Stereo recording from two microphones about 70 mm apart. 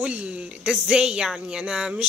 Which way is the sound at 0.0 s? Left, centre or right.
Centre.